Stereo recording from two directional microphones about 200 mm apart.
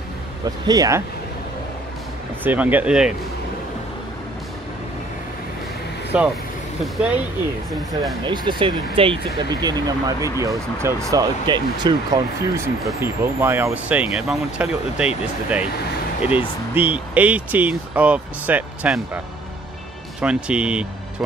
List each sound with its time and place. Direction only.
0.7 s speech: 15° right (ahead or behind)
2.4 s speech: 10° right (ahead or behind)
6.1 s speech: 5° right (ahead or behind)
8.2 s speech: 25° right (ahead or behind); by 15.0 s 5° right (ahead or behind)
16.2 s speech: 10° right (ahead or behind)
20.2 s speech: 5° right (ahead or behind)